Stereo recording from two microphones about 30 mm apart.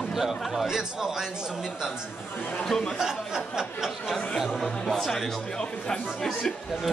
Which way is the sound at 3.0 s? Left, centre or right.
Centre.